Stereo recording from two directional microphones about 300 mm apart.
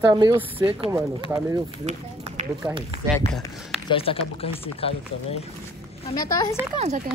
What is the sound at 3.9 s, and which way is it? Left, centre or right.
A woman's voice, centre.